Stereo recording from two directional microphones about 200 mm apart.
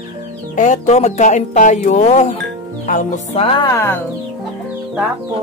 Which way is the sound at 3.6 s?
10° left (ahead or behind).